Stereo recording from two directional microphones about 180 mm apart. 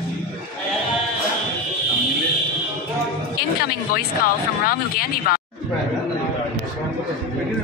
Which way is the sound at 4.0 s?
55° left (ahead or behind).